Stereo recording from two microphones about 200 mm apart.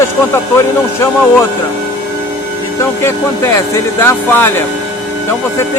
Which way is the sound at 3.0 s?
15° left (ahead or behind).